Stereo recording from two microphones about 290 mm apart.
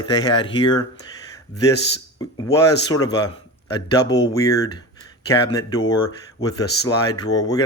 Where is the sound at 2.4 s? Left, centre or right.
Centre.